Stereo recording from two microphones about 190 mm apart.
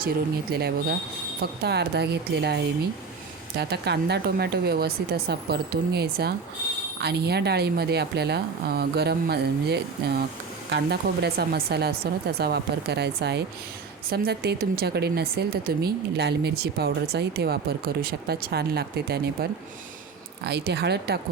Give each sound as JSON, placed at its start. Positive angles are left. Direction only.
{"t": 0.5, "sound": "speech", "side_deg": -55}
{"t": 3.6, "sound": "speech", "side_deg": -60}